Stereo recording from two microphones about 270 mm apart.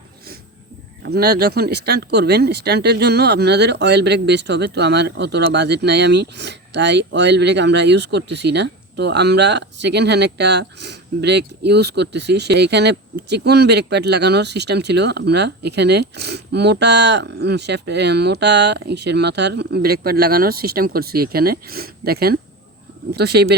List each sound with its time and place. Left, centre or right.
1.0 s speech: right